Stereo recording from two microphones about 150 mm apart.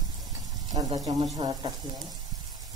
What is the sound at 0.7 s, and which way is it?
Speech, 30° right (ahead or behind).